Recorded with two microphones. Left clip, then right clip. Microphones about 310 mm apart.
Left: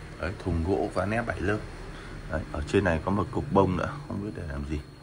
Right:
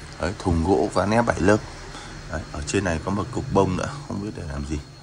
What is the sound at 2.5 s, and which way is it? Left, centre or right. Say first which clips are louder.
Speech: right 1 dB; centre.